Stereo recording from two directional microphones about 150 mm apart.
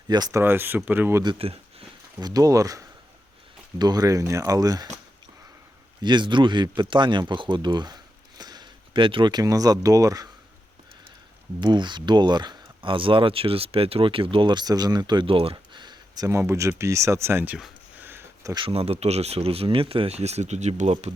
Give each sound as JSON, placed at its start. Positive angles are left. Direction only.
{"t": 0.1, "sound": "speech", "side_deg": -25}
{"t": 1.2, "sound": "speech", "side_deg": -35}
{"t": 2.1, "sound": "speech", "side_deg": -25}
{"t": 6.0, "sound": "speech", "side_deg": -30}
{"t": 11.6, "sound": "speech", "side_deg": -30}
{"t": 18.0, "sound": "a sound", "side_deg": -15}
{"t": 18.5, "sound": "speech", "side_deg": -40}